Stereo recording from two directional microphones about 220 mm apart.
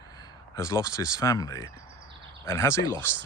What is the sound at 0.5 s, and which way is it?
Speech, 10° left (ahead or behind).